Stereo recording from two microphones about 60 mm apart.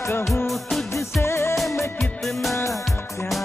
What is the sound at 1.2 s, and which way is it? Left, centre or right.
Music, left.